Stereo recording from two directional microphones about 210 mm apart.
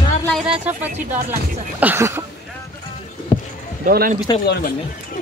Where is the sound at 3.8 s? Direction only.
40° right (ahead or behind).